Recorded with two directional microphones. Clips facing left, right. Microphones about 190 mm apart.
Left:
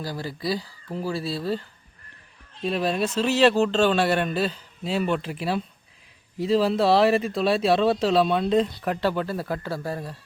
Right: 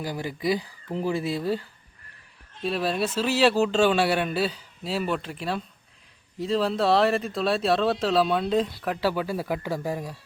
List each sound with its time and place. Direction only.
0.0 s speech: 15° right (ahead or behind)
2.6 s speech: centre (ahead or behind)